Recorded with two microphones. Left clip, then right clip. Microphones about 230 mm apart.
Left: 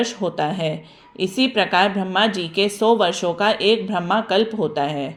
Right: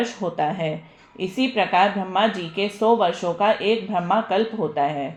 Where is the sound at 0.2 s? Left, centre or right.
Left.